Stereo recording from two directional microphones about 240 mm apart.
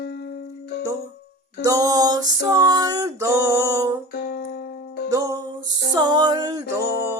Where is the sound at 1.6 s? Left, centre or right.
Centre.